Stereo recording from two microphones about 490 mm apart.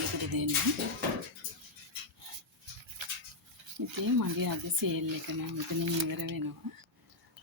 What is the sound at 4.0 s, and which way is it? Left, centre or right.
Speech, right.